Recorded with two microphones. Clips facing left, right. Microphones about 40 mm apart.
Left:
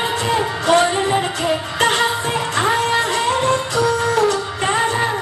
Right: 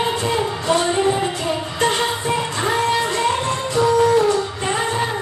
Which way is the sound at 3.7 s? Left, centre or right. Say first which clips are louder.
Right 7 dB; left.